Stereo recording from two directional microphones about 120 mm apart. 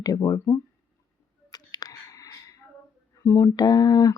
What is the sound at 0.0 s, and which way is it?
Speech, 30° left (ahead or behind).